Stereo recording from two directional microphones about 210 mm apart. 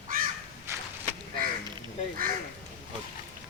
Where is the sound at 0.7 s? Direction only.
15° right (ahead or behind).